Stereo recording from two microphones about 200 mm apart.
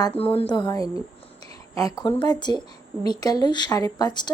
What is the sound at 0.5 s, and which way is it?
Speech, 20° left (ahead or behind).